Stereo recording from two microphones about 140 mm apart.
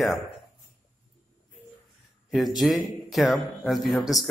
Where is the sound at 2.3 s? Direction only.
Centre (ahead or behind).